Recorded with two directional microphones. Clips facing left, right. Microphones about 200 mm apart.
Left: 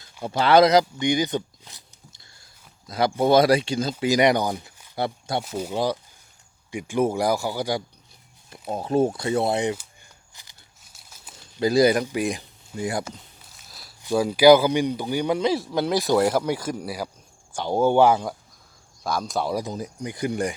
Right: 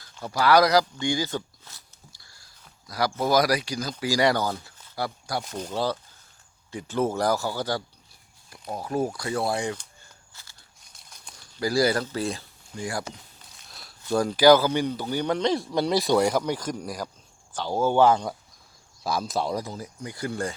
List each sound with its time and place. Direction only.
0.1 s speech: 20° left (ahead or behind)
5.4 s speech: 5° left (ahead or behind)
8.7 s speech: 25° left (ahead or behind)
10.3 s a sound: 15° left (ahead or behind)
10.8 s a sound: 5° left (ahead or behind)
11.5 s speech: 20° left (ahead or behind)
13.5 s a sound: centre (ahead or behind)
14.0 s speech: 10° left (ahead or behind)
19.5 s speech: 20° left (ahead or behind)